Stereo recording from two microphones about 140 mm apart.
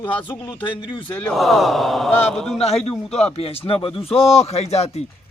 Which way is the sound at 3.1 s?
50° left (ahead or behind).